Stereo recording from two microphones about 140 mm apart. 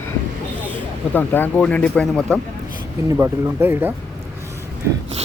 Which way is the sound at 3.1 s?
20° right (ahead or behind).